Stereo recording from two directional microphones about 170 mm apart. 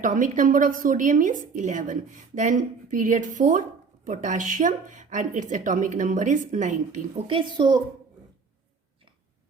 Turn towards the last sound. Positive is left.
turn(degrees=-25)  # may be behind; listen again after turning